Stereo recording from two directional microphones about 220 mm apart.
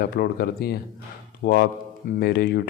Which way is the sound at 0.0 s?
45° left (ahead or behind).